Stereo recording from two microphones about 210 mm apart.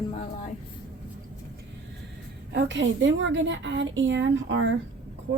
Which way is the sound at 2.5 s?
60° right (ahead or behind).